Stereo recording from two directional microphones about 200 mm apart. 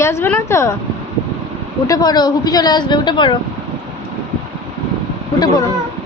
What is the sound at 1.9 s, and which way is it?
A woman's voice, 20° left (ahead or behind).